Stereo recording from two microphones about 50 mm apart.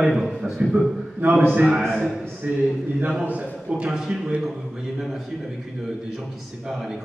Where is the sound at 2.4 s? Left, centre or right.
Right.